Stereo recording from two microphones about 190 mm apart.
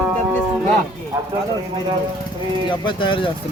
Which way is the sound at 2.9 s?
25° left (ahead or behind).